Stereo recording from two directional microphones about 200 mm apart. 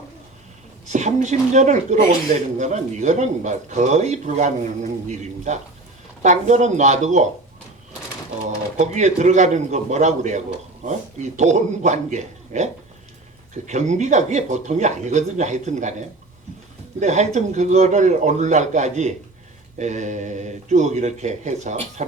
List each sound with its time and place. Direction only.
0.9 s speech: 35° right (ahead or behind)
8.8 s speech: 35° right (ahead or behind)